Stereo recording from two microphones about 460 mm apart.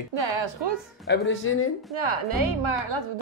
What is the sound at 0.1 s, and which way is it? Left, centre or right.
Speech, right.